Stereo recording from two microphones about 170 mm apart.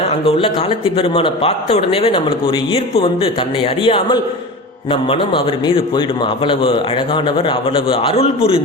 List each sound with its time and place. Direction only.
0.3 s a man's voice: 30° left (ahead or behind)